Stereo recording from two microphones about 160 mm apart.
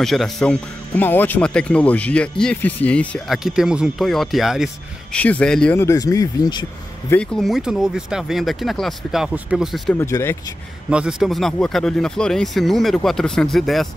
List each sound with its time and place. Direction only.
0.0 s speech: centre (ahead or behind)
3.4 s speech: 5° right (ahead or behind)
5.1 s speech: 10° left (ahead or behind)
5.8 s speech: 20° left (ahead or behind)
7.1 s speech: 5° left (ahead or behind)
9.9 s speech: 15° left (ahead or behind)
10.9 s speech: 5° right (ahead or behind)